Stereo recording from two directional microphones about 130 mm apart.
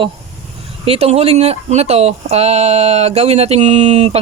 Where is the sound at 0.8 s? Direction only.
50° right (ahead or behind).